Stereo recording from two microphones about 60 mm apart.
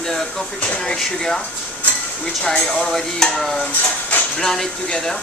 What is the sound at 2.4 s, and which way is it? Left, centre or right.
Speech, centre.